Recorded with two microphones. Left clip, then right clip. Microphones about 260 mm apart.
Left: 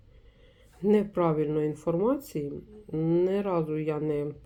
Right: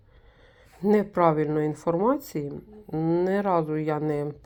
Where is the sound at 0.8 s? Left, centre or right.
Right.